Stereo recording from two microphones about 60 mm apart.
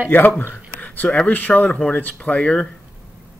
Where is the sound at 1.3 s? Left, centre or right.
Left.